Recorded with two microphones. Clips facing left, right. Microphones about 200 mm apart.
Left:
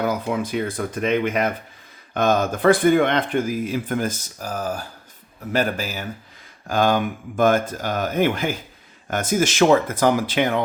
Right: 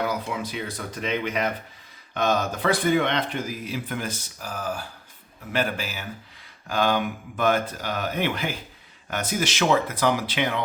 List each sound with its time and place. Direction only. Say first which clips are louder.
0.0 s speech: left 5 dB; 50° left (ahead or behind)